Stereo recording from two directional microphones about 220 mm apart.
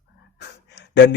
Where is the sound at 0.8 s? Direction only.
50° left (ahead or behind).